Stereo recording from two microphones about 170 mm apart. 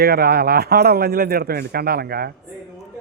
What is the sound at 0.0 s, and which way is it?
Speech, 65° right (ahead or behind).